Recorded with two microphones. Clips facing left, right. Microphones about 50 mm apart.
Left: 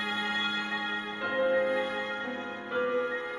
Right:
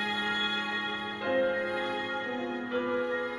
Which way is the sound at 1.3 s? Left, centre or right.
Centre.